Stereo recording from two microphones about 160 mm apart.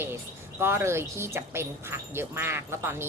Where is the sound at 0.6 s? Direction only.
15° right (ahead or behind).